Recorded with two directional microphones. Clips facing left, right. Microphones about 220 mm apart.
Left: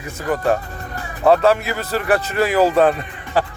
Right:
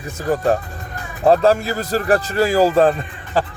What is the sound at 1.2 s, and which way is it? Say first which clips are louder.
Speech: even; 35° right (ahead or behind).